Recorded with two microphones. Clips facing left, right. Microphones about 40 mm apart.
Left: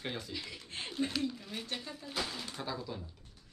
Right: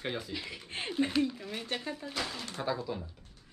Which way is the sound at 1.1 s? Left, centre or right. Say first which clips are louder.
Right 5 dB; centre.